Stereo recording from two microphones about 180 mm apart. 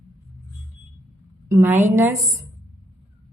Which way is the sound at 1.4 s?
15° right (ahead or behind).